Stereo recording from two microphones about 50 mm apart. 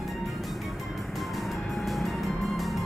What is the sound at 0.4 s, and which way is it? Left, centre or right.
Music, centre.